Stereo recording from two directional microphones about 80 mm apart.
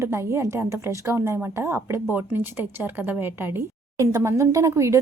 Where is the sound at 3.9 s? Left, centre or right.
Right.